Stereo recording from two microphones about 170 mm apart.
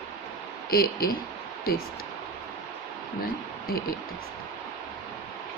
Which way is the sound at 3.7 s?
60° left (ahead or behind).